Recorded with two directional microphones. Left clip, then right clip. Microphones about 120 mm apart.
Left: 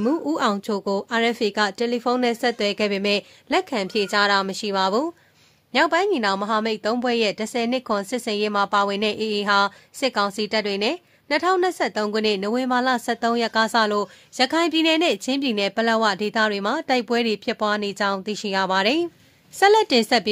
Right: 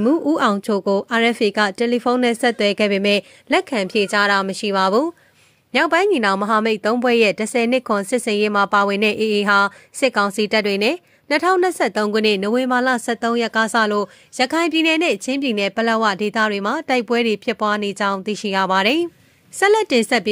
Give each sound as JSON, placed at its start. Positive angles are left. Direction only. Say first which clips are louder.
{"t": 0.0, "sound": "a woman's voice", "louder": "right 5 dB", "side_deg": -25}
{"t": 19.6, "sound": "a woman's voice", "louder": "right 1 dB", "side_deg": -15}